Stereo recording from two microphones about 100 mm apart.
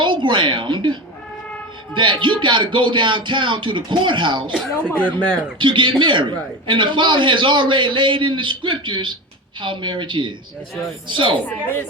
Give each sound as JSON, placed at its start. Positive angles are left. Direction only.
{"t": 0.0, "sound": "a sound", "side_deg": -55}
{"t": 1.9, "sound": "speech", "side_deg": -55}
{"t": 4.8, "sound": "speech", "side_deg": 15}
{"t": 5.5, "sound": "speech", "side_deg": -55}
{"t": 11.4, "sound": "speech", "side_deg": 20}